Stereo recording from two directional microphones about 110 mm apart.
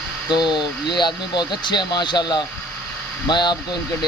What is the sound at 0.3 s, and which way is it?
Speech, 40° left (ahead or behind).